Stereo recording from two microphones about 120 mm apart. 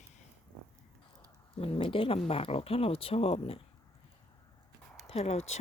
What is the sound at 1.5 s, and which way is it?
Speech, 50° left (ahead or behind).